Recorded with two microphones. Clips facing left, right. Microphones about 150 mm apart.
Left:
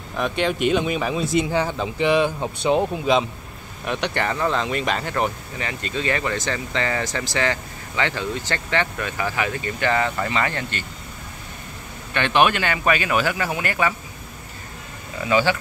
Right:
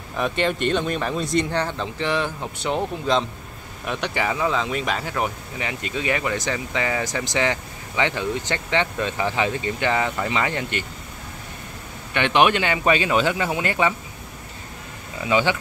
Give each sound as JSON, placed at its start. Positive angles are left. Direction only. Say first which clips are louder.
{"t": 0.1, "sound": "speech", "louder": "even", "side_deg": 0}
{"t": 3.8, "sound": "speech", "louder": "left 1 dB", "side_deg": 0}
{"t": 12.1, "sound": "speech", "louder": "right 1 dB", "side_deg": -15}
{"t": 15.2, "sound": "speech", "louder": "left 1 dB", "side_deg": -20}